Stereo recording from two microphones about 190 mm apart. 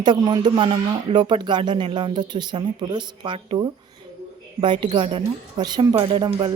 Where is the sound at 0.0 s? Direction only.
20° right (ahead or behind).